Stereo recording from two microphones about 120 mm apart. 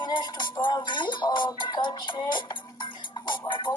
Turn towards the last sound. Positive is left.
turn(degrees=40)  # may be behind; listen again after turning